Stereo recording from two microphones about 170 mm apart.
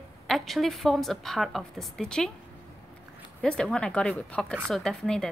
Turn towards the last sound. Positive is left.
turn(degrees=5)  # may be behind; listen again after turning